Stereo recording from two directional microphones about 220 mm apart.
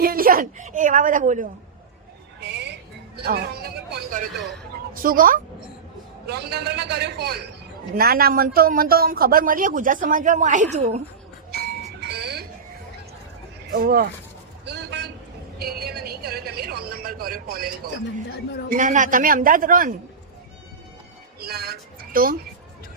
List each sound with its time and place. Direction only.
0.0 s speech: 40° right (ahead or behind)
2.4 s a sound: 50° right (ahead or behind)
3.2 s a man's voice: 45° right (ahead or behind)
11.5 s music: 50° right (ahead or behind)
13.7 s a man's voice: 40° right (ahead or behind)
14.6 s a sound: 50° right (ahead or behind)
18.7 s speech: 35° right (ahead or behind)
21.4 s music: 45° right (ahead or behind)